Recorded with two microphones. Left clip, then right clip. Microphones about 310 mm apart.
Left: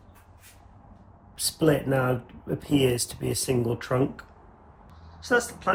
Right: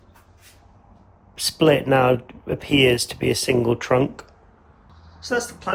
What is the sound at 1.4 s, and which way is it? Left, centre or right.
Speech, centre.